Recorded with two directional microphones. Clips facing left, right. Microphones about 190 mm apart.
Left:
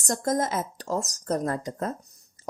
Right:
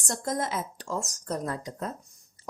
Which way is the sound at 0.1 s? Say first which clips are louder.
Left 4 dB; 45° left (ahead or behind).